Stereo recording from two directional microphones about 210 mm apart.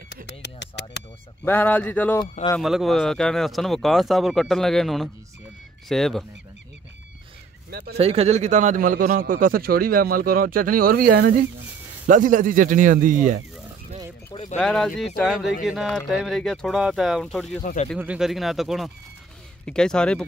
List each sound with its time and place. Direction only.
0.3 s speech: 55° left (ahead or behind)
1.4 s speech: 10° left (ahead or behind)
7.7 s a man's voice: 50° right (ahead or behind)
8.0 s a man's voice: 30° right (ahead or behind)
14.3 s speech: 35° left (ahead or behind)
14.6 s speech: 5° left (ahead or behind)